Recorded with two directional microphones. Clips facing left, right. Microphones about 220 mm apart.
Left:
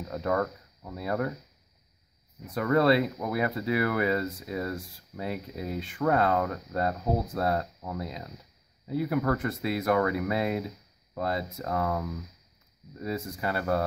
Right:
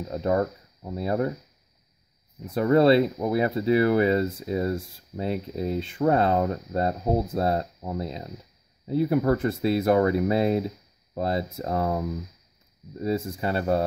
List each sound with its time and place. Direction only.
0.1 s speech: 25° right (ahead or behind)
2.5 s speech: 30° right (ahead or behind)